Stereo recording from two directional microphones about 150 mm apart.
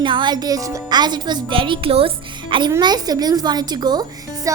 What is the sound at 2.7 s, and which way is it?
A woman's voice, 25° right (ahead or behind).